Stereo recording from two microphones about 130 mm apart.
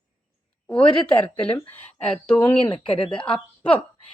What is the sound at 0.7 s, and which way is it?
Speech, 10° left (ahead or behind).